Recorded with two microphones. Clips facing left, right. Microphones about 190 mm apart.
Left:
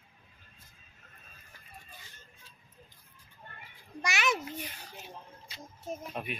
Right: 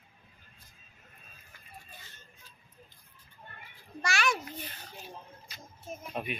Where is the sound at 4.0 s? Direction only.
20° left (ahead or behind).